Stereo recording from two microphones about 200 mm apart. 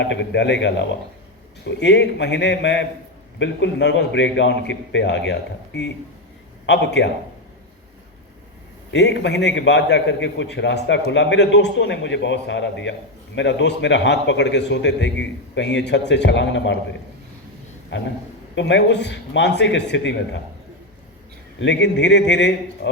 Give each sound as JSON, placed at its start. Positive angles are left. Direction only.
{"t": 0.0, "sound": "a man's voice", "side_deg": 60}
{"t": 8.9, "sound": "a man's voice", "side_deg": 60}
{"t": 17.9, "sound": "a man's voice", "side_deg": 65}
{"t": 21.6, "sound": "a man's voice", "side_deg": 60}